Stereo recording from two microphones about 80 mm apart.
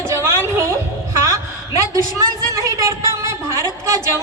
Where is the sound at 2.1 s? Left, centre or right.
Right.